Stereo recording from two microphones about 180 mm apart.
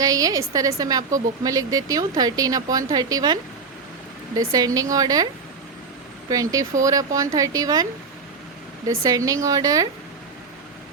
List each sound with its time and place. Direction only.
0.0 s a woman's voice: 20° right (ahead or behind)
4.4 s a woman's voice: 20° right (ahead or behind)
8.9 s a woman's voice: 20° right (ahead or behind)